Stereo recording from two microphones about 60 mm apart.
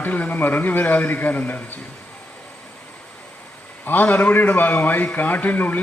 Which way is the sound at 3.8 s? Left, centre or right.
Left.